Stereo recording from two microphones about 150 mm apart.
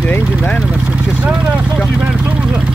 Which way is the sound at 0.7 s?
10° right (ahead or behind).